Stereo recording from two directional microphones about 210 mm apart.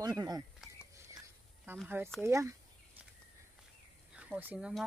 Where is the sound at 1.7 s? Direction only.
10° right (ahead or behind).